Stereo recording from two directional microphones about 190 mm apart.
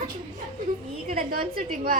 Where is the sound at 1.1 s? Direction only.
45° right (ahead or behind).